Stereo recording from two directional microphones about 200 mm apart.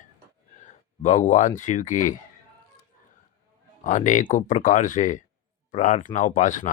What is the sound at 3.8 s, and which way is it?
Speech, 40° left (ahead or behind).